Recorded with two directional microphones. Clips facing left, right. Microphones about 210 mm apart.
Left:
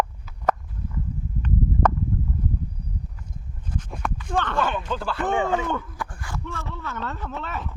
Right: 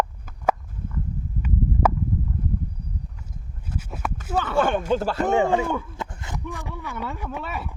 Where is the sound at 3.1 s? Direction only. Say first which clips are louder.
Left 1 dB; 5° right (ahead or behind).